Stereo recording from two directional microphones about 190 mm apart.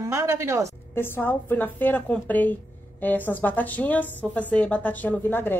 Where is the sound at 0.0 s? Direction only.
15° right (ahead or behind).